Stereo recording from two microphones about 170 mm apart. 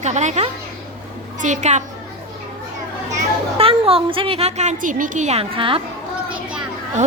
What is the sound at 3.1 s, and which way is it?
A child's voice, 35° right (ahead or behind).